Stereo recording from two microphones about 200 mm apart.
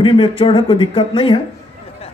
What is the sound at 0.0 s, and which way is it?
A man's voice, 25° left (ahead or behind).